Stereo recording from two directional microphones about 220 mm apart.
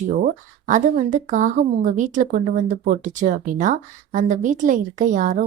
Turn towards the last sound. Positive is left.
turn(degrees=-35)  # may be behind; listen again after turning